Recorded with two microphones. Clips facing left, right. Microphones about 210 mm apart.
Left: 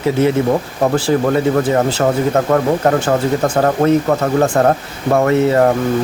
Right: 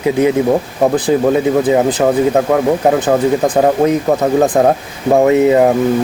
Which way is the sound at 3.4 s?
15° right (ahead or behind).